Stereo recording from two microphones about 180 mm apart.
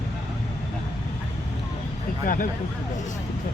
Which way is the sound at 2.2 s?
50° left (ahead or behind).